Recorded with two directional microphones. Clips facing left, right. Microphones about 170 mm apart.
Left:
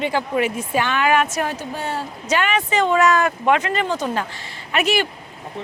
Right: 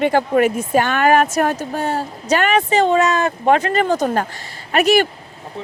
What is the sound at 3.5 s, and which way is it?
Speech, 35° right (ahead or behind).